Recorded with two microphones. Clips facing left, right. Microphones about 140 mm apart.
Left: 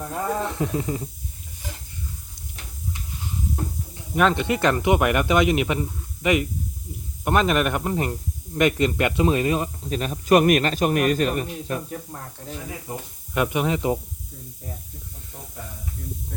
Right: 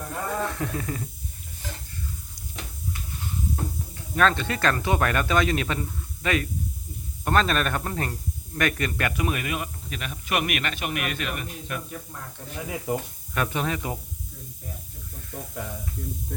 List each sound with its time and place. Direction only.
0.3 s speech: 20° left (ahead or behind)
3.5 s speech: 15° left (ahead or behind); by 12.2 s 35° left (ahead or behind)
13.3 s speech: 15° left (ahead or behind)